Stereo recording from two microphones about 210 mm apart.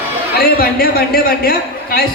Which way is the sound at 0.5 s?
45° left (ahead or behind).